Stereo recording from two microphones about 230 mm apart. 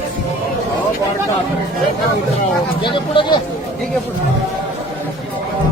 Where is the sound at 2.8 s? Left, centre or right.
Left.